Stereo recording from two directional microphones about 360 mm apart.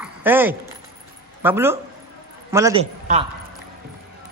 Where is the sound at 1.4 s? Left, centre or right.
Centre.